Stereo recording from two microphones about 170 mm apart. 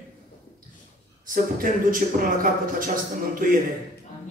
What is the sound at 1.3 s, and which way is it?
A man's voice, 55° right (ahead or behind).